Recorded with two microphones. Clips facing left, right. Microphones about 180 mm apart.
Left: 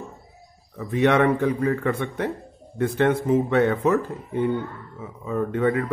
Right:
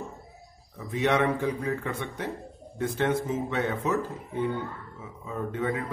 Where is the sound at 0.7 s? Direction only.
60° left (ahead or behind).